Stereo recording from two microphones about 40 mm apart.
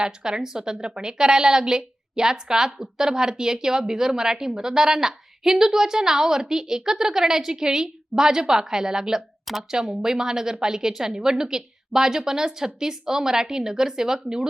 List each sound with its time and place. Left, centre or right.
0.0 s a woman's voice: right